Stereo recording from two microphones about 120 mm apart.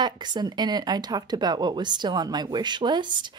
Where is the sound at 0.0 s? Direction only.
40° right (ahead or behind).